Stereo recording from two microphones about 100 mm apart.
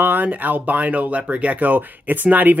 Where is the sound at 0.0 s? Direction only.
15° right (ahead or behind).